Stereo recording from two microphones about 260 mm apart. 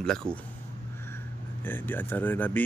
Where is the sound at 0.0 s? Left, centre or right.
Centre.